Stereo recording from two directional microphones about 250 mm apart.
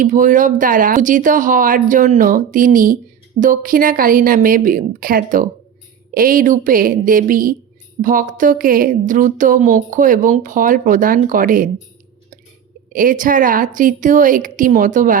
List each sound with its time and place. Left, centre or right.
0.0 s a woman's voice: right
12.9 s a woman's voice: right